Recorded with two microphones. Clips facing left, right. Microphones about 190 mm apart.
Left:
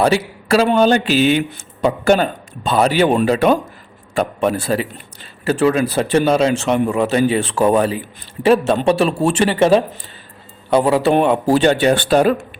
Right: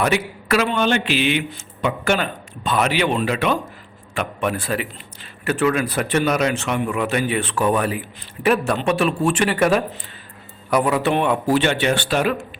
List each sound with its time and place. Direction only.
0.0 s a man's voice: 30° left (ahead or behind)